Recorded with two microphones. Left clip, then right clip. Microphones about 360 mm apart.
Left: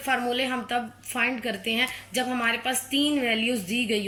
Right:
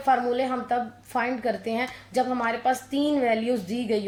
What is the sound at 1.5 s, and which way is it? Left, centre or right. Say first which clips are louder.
Speech: left 1 dB; centre.